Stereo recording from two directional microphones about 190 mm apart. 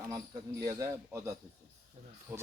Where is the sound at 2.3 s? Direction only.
10° right (ahead or behind).